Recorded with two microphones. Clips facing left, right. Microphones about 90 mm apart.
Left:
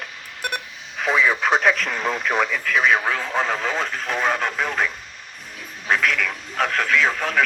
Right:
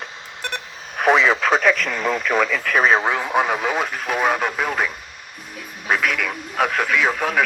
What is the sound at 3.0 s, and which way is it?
Speech, 20° right (ahead or behind).